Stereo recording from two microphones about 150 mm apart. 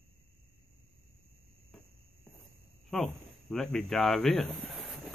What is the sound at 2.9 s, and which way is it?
Speech, 5° left (ahead or behind).